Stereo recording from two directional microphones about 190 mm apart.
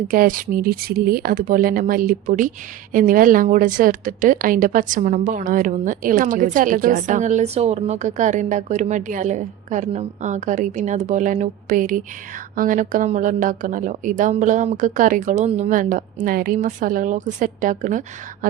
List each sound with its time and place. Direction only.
0.1 s a woman's voice: 45° right (ahead or behind)